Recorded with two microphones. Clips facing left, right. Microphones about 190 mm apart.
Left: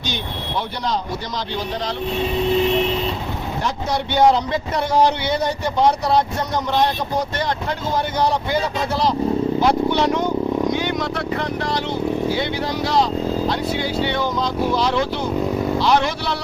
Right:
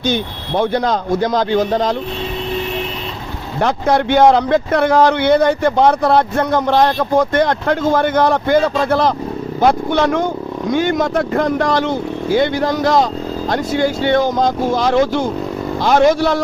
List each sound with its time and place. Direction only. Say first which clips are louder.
0.1 s a man's voice: right 4 dB; 50° right (ahead or behind)
3.6 s a man's voice: right 10 dB; 60° right (ahead or behind)